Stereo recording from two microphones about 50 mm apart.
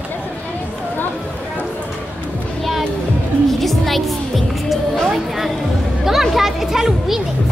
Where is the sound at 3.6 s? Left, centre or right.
Centre.